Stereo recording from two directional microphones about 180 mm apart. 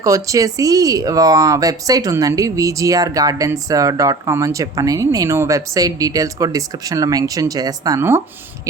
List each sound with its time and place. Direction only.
0.0 s speech: 20° right (ahead or behind)